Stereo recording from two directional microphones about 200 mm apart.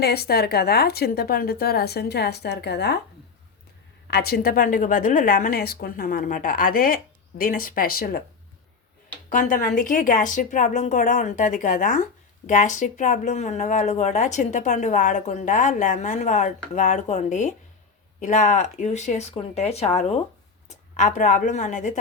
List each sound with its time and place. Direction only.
0.0 s a woman's voice: 50° left (ahead or behind)
4.1 s a woman's voice: 50° left (ahead or behind)
9.3 s speech: 40° left (ahead or behind)